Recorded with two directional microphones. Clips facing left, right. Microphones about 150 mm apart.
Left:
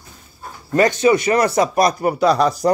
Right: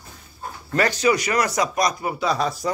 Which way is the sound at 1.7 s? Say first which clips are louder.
Left 7 dB; 55° left (ahead or behind).